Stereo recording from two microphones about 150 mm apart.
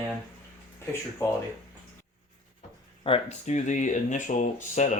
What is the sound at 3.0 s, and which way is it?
Speech, 45° left (ahead or behind).